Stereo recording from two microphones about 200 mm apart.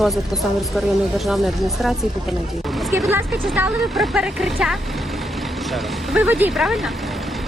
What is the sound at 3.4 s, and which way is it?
Speech, 5° right (ahead or behind).